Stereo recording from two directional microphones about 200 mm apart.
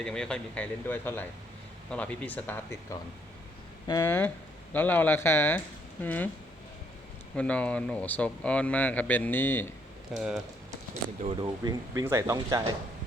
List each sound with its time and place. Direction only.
0.0 s a man's voice: 5° left (ahead or behind)
7.3 s a man's voice: 5° left (ahead or behind)
10.2 s speech: centre (ahead or behind)
11.3 s speech: 20° right (ahead or behind)